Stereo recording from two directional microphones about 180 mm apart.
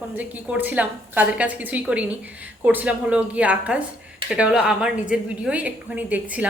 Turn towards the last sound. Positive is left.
turn(degrees=-10)  # may be behind; listen again after turning